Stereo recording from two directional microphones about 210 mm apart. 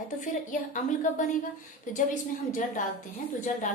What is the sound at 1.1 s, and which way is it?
Speech, 35° left (ahead or behind).